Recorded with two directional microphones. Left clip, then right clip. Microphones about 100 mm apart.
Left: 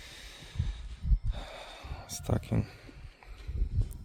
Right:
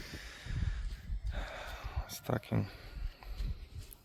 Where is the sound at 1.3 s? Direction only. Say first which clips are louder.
Right 1 dB; 40° left (ahead or behind).